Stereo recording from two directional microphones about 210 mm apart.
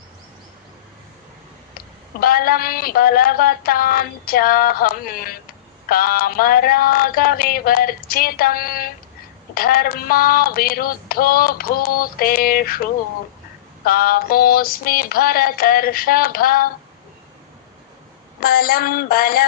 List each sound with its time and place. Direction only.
2.2 s female singing: 45° left (ahead or behind)
13.8 s female singing: 45° left (ahead or behind)
18.3 s female singing: 45° left (ahead or behind)